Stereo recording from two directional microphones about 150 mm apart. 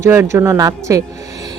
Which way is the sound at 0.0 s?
15° right (ahead or behind).